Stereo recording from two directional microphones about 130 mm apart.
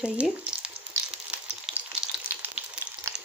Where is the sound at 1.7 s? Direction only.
15° right (ahead or behind).